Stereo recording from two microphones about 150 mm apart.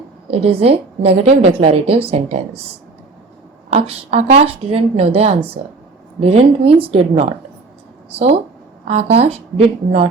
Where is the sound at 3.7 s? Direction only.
45° right (ahead or behind).